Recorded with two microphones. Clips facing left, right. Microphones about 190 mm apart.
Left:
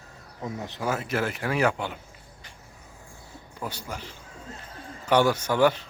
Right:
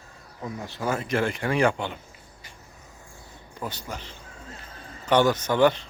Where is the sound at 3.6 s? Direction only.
10° left (ahead or behind).